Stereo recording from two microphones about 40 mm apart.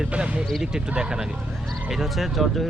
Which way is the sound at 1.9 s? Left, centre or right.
Centre.